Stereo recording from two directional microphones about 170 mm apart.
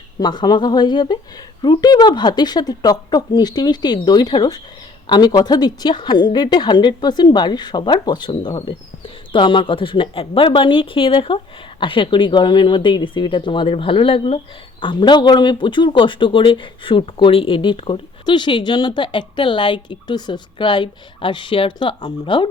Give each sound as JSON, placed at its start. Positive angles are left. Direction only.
{"t": 0.2, "sound": "speech", "side_deg": 25}